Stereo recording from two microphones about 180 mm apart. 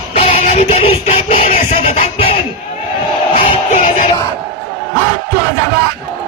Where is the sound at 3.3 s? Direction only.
40° left (ahead or behind).